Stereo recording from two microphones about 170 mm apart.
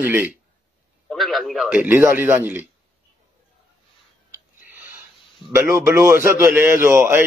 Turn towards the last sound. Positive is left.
turn(degrees=-15)  # may be behind; listen again after turning